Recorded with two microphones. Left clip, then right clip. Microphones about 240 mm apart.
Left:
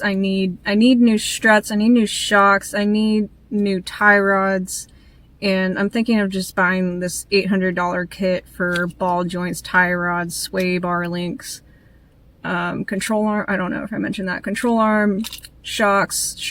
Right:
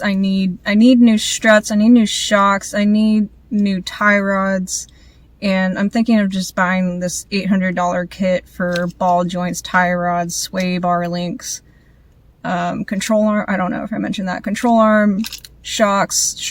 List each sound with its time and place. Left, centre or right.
0.0 s a woman's voice: centre